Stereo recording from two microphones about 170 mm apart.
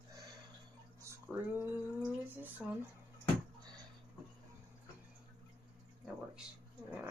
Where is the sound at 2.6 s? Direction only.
10° right (ahead or behind).